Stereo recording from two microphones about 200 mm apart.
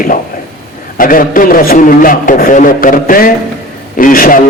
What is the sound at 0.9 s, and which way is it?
A man's voice, 45° left (ahead or behind).